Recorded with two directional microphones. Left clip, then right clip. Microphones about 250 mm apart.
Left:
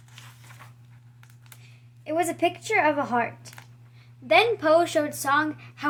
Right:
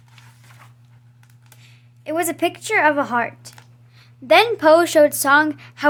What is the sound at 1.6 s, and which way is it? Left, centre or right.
A woman's voice, right.